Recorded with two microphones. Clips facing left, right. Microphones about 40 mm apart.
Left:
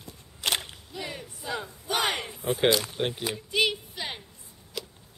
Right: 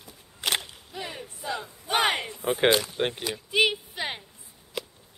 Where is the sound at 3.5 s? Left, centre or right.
Centre.